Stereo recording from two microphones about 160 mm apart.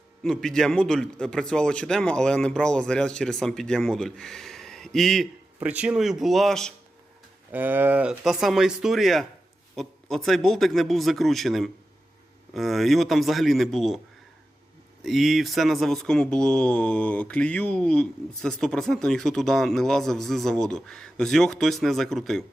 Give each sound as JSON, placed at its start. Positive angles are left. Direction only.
{"t": 0.2, "sound": "speech", "side_deg": 5}
{"t": 7.5, "sound": "speech", "side_deg": -10}
{"t": 15.0, "sound": "speech", "side_deg": 0}